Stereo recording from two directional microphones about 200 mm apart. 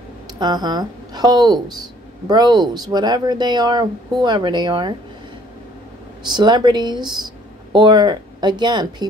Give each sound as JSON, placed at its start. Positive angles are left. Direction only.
{"t": 0.4, "sound": "speech", "side_deg": -20}
{"t": 6.3, "sound": "speech", "side_deg": -20}